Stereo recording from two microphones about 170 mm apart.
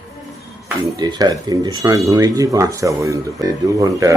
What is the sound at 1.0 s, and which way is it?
Speech, 25° right (ahead or behind).